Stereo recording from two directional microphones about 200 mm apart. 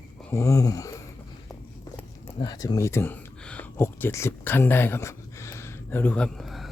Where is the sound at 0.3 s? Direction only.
15° left (ahead or behind).